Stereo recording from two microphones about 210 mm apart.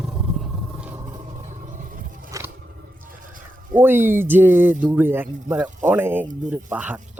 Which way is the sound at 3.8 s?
10° right (ahead or behind).